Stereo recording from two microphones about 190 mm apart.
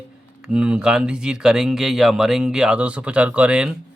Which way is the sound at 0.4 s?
5° right (ahead or behind).